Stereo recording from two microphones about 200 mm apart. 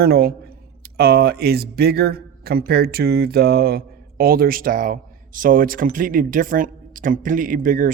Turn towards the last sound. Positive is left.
turn(degrees=-40)  # may be behind; listen again after turning